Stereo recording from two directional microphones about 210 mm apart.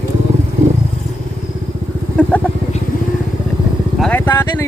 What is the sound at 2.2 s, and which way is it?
Vehicle, 5° left (ahead or behind).